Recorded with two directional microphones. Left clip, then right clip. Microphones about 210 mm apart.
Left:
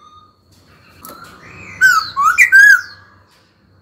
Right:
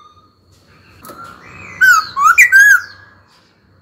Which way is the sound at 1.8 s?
15° right (ahead or behind).